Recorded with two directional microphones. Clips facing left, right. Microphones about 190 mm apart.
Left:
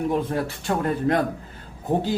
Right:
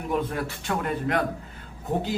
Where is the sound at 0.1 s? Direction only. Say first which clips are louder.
Left 3 dB; 30° left (ahead or behind).